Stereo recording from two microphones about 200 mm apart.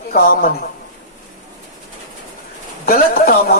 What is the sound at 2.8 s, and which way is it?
Speech, 45° left (ahead or behind).